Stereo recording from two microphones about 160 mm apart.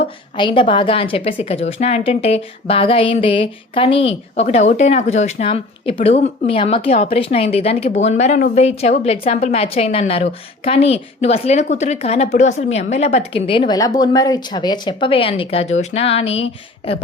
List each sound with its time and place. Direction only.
0.3 s a woman's voice: 30° left (ahead or behind)